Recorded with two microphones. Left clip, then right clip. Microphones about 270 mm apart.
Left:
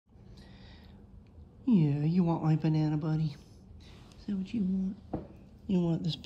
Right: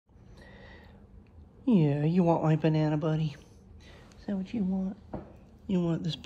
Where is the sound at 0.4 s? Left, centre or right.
Left.